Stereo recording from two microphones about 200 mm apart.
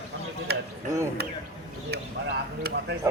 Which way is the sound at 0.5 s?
55° right (ahead or behind).